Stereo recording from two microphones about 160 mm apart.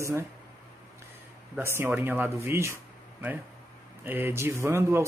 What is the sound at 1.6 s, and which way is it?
Speech, 15° right (ahead or behind).